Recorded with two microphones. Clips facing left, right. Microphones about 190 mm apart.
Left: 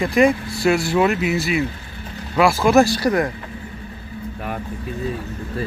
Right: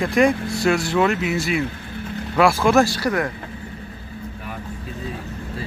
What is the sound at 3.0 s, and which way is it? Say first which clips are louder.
Speech: left 3 dB; 20° left (ahead or behind).